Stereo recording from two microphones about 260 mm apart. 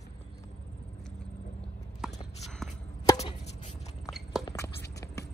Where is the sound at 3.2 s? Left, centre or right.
Left.